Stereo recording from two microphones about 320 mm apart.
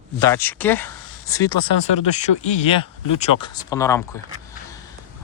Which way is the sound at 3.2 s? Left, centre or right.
Centre.